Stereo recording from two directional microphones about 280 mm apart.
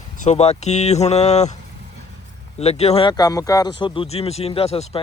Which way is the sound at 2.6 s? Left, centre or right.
Left.